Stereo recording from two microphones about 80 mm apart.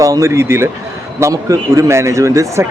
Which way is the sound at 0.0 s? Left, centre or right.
Right.